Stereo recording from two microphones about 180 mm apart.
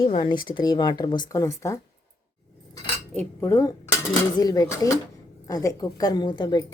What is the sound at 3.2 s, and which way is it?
Speech, 15° left (ahead or behind).